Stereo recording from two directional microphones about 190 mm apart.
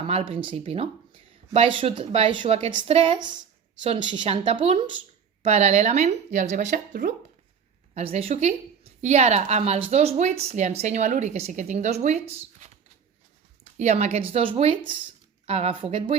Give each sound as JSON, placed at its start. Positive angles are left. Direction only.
{"t": 0.1, "sound": "a woman's voice", "side_deg": -30}
{"t": 7.9, "sound": "a woman's voice", "side_deg": -35}
{"t": 13.7, "sound": "a woman's voice", "side_deg": -35}